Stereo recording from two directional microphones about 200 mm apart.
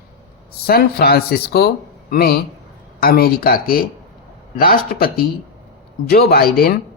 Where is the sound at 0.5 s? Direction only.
50° left (ahead or behind).